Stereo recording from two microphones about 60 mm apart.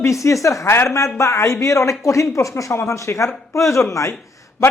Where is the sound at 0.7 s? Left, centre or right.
Left.